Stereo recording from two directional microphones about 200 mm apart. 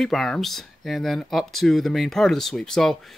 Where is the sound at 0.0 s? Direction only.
Centre (ahead or behind).